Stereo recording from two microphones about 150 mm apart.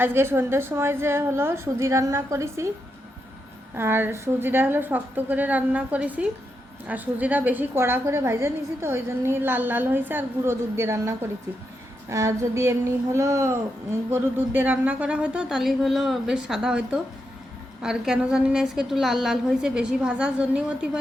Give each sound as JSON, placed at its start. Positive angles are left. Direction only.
{"t": 0.0, "sound": "a woman's voice", "side_deg": -15}
{"t": 3.8, "sound": "a woman's voice", "side_deg": -15}
{"t": 12.0, "sound": "a sound", "side_deg": -20}
{"t": 13.1, "sound": "a woman's voice", "side_deg": -20}